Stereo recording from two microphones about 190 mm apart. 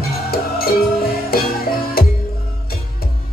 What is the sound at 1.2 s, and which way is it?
Music, 50° left (ahead or behind).